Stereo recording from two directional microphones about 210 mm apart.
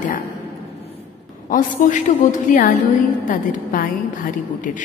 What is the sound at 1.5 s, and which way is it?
A woman's voice, 40° left (ahead or behind).